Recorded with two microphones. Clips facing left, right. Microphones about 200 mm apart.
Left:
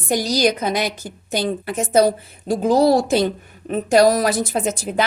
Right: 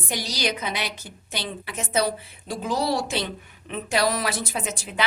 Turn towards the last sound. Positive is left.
turn(degrees=45)  # may be behind; listen again after turning